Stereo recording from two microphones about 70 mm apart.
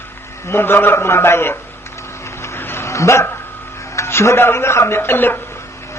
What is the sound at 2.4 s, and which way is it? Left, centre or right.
Dog, left.